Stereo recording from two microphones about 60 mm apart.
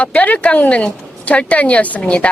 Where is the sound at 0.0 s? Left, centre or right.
Left.